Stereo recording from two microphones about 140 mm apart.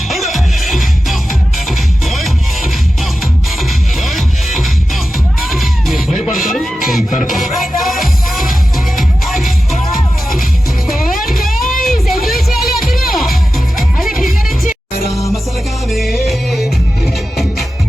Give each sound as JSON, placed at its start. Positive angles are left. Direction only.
{"t": 0.1, "sound": "music", "side_deg": 0}
{"t": 3.6, "sound": "music", "side_deg": 0}
{"t": 11.3, "sound": "music", "side_deg": 0}
{"t": 15.9, "sound": "music", "side_deg": 0}